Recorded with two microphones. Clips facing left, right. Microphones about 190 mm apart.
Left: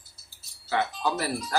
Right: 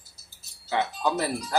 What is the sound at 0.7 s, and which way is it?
Speech, 20° right (ahead or behind).